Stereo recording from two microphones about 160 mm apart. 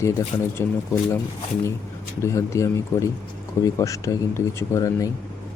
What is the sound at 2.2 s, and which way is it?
Speech, 20° left (ahead or behind).